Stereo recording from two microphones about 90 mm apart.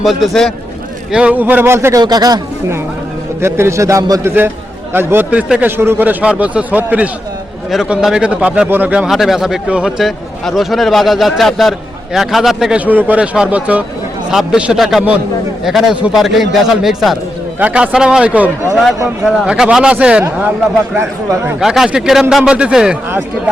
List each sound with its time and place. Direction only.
0.0 s a man's voice: centre (ahead or behind)
1.1 s speech: 15° right (ahead or behind)
2.0 s a man's voice: 45° right (ahead or behind)
3.4 s a man's voice: 30° right (ahead or behind)
4.9 s a man's voice: 20° right (ahead or behind)
7.7 s a man's voice: 5° right (ahead or behind)
9.0 s a man's voice: centre (ahead or behind)
12.8 s a man's voice: 20° right (ahead or behind); by 17.2 s 5° right (ahead or behind)
17.6 s a man's voice: 15° right (ahead or behind)
21.6 s a man's voice: 5° right (ahead or behind)